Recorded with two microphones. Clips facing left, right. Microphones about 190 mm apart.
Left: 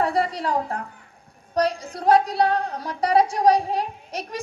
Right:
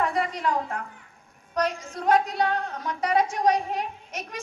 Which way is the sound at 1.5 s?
35° left (ahead or behind).